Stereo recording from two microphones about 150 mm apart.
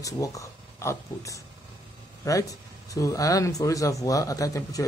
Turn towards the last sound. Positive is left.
turn(degrees=20)  # may be behind; listen again after turning